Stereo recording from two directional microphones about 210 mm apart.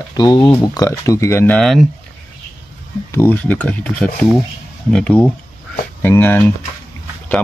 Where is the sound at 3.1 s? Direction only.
10° left (ahead or behind).